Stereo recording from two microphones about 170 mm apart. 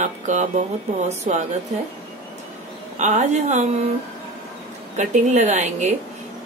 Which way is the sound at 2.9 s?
45° right (ahead or behind).